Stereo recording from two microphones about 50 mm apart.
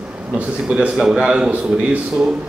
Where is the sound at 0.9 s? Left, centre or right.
Centre.